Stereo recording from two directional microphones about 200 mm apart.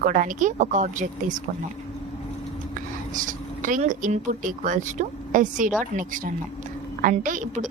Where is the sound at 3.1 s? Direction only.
40° right (ahead or behind).